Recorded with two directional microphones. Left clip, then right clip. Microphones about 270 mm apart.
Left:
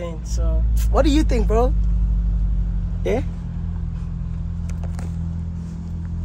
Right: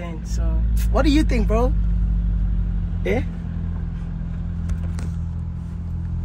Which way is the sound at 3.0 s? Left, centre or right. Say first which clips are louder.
Left 1 dB; centre.